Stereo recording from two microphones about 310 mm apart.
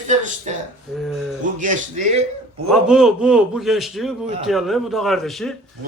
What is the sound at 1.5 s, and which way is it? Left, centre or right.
Speech, right.